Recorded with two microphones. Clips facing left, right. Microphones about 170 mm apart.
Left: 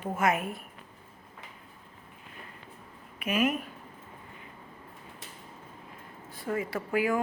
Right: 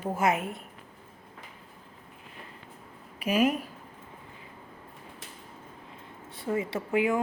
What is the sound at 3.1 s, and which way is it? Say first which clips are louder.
Speech: right 3 dB; 30° right (ahead or behind).